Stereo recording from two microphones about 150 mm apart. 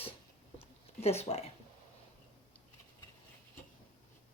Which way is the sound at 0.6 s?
45° left (ahead or behind).